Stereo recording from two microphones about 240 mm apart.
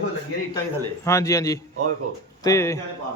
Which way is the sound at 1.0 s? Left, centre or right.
Centre.